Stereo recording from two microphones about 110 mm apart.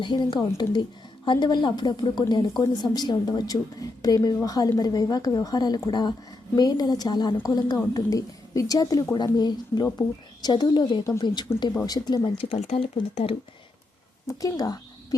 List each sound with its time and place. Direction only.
0.0 s a woman's voice: 45° left (ahead or behind)
11.5 s speech: 25° left (ahead or behind)
11.9 s a woman's voice: 40° left (ahead or behind)
12.4 s speech: 75° left (ahead or behind)
14.3 s a woman's voice: 35° left (ahead or behind)